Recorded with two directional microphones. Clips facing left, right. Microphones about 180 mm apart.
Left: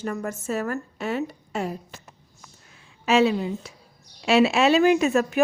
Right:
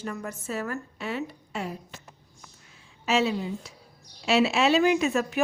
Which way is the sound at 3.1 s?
55° left (ahead or behind).